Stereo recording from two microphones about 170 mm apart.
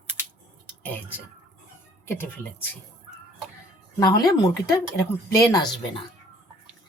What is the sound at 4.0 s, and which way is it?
Speech, 25° left (ahead or behind).